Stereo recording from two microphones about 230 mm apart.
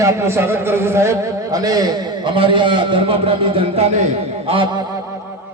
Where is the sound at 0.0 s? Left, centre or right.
Centre.